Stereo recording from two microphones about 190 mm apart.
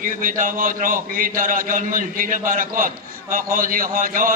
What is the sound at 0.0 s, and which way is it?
A man's voice, 45° right (ahead or behind).